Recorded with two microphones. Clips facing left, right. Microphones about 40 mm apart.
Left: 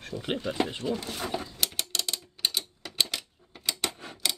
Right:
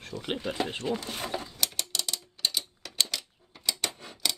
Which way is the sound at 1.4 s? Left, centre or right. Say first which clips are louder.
Left 1 dB; centre.